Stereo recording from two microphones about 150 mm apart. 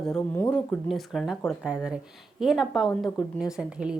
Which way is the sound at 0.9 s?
Centre (ahead or behind).